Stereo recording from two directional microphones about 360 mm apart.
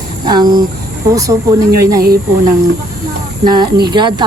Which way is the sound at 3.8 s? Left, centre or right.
Centre.